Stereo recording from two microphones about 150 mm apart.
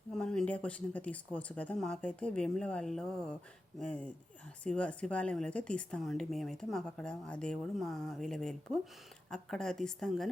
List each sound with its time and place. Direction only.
0.2 s a woman's voice: 5° left (ahead or behind)